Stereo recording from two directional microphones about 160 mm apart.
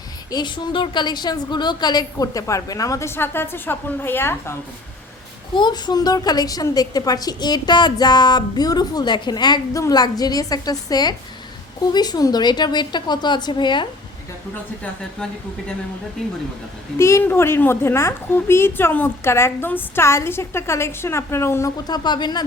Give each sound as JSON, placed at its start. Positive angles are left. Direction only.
{"t": 0.3, "sound": "a woman's voice", "side_deg": 25}
{"t": 5.5, "sound": "a woman's voice", "side_deg": 25}
{"t": 17.0, "sound": "a woman's voice", "side_deg": 15}